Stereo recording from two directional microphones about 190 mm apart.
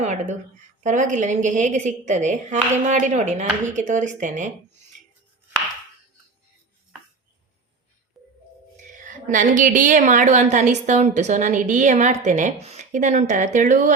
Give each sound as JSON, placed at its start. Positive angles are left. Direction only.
{"t": 0.0, "sound": "a woman's voice", "side_deg": -40}
{"t": 9.0, "sound": "a woman's voice", "side_deg": -45}